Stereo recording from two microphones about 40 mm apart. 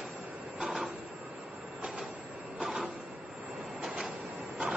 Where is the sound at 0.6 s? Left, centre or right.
Centre.